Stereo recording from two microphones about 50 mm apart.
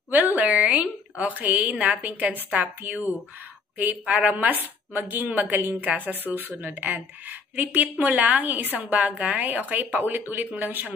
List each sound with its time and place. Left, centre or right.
0.4 s a woman's voice: right